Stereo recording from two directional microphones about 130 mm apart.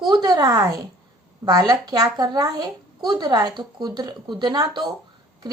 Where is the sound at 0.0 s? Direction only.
35° right (ahead or behind).